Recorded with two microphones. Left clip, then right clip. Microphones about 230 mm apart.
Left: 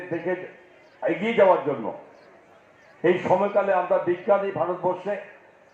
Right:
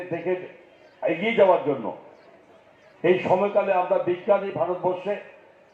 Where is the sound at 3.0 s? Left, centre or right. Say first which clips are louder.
Even; left.